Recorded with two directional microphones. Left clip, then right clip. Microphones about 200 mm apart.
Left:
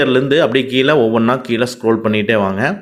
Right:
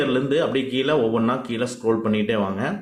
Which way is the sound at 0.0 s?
40° left (ahead or behind).